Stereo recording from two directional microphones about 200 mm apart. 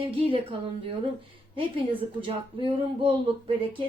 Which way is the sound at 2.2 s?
25° right (ahead or behind).